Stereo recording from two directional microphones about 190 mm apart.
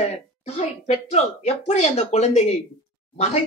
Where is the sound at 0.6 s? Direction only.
35° left (ahead or behind).